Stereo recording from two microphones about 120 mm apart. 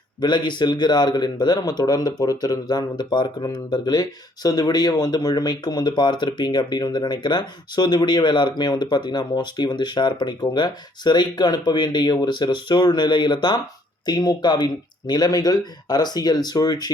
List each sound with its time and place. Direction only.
0.2 s speech: 40° left (ahead or behind)